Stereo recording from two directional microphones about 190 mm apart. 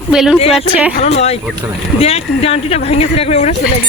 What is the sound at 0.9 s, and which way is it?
Speech, 35° left (ahead or behind).